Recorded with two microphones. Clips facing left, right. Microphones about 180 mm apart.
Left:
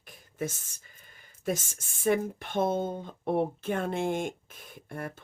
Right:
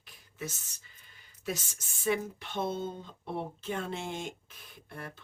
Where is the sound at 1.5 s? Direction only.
50° left (ahead or behind).